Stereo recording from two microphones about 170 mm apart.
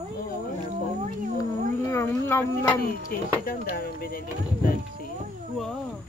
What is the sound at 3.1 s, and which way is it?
Speech, 65° left (ahead or behind).